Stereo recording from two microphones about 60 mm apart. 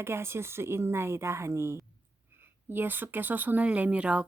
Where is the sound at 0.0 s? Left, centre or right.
Right.